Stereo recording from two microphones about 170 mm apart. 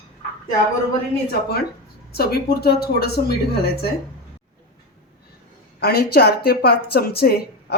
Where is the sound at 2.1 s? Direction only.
70° left (ahead or behind).